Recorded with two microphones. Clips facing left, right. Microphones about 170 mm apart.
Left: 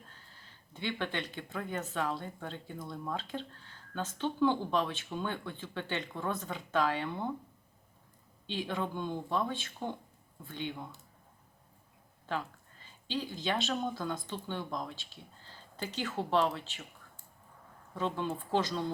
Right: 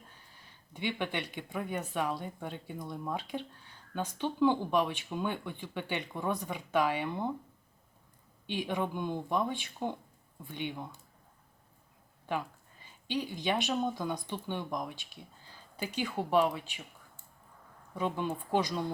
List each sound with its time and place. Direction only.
0.7 s speech: 15° right (ahead or behind)
8.4 s speech: 15° right (ahead or behind)
12.2 s speech: 15° right (ahead or behind)
17.9 s speech: 15° right (ahead or behind)